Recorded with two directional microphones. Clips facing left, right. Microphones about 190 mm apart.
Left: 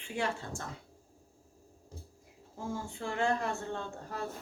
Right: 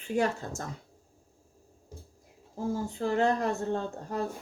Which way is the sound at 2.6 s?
35° right (ahead or behind).